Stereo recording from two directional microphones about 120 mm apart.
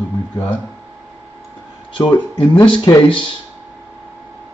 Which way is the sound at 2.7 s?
45° left (ahead or behind).